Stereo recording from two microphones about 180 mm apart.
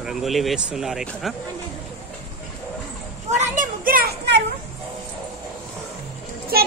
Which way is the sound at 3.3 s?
45° right (ahead or behind).